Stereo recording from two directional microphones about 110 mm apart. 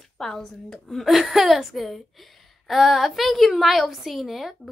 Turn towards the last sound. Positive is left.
turn(degrees=0)  # may be behind; listen again after turning